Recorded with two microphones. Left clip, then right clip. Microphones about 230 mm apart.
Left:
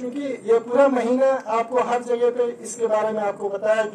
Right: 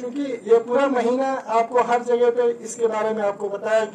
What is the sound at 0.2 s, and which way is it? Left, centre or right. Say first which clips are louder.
A man's voice: right 2 dB; right.